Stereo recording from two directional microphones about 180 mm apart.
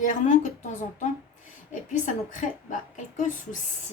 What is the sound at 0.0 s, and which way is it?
Speech, 45° left (ahead or behind).